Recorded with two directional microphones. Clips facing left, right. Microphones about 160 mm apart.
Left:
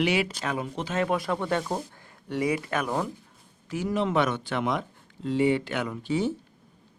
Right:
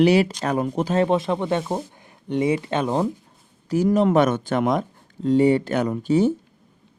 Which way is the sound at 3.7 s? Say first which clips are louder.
Right 8 dB; 40° right (ahead or behind).